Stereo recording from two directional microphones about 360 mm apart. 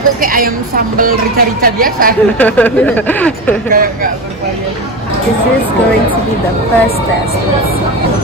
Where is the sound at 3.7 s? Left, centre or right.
Right.